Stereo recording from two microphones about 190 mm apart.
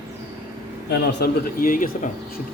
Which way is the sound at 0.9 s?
60° left (ahead or behind).